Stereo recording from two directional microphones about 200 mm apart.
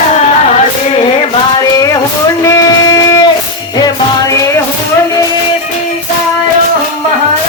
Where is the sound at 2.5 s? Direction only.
15° left (ahead or behind).